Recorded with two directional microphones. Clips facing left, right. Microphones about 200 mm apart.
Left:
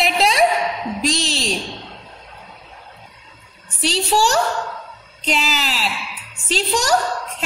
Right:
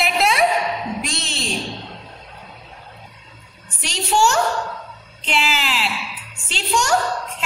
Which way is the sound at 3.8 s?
35° left (ahead or behind).